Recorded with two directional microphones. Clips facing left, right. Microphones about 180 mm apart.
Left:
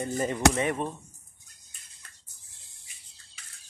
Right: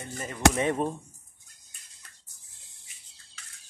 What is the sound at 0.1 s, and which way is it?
Speech, 25° left (ahead or behind).